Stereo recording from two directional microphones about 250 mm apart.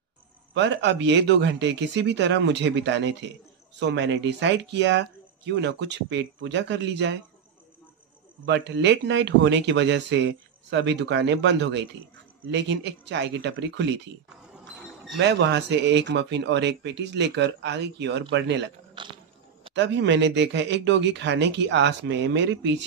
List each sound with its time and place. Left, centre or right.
0.6 s speech: right
8.5 s speech: right
15.1 s speech: right
19.0 s biting: centre
19.7 s speech: right